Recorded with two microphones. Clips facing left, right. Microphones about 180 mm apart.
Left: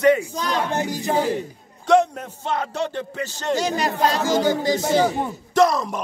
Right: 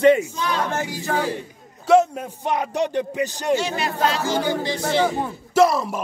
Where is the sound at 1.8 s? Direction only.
5° right (ahead or behind).